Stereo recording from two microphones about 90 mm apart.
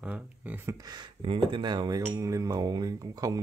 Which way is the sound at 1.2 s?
80° right.